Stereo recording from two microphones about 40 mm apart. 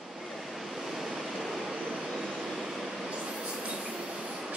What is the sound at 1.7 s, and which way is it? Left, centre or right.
Vehicle, centre.